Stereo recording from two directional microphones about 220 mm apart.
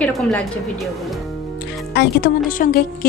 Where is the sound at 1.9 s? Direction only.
45° left (ahead or behind).